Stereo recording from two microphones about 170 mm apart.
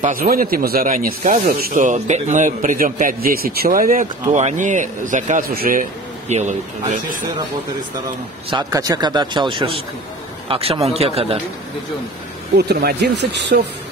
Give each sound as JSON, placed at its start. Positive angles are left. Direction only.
{"t": 0.0, "sound": "a man's voice", "side_deg": -55}
{"t": 8.5, "sound": "speech", "side_deg": -25}
{"t": 12.5, "sound": "speech", "side_deg": -70}